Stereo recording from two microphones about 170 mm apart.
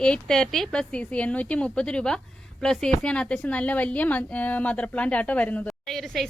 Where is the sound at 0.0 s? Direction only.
5° left (ahead or behind).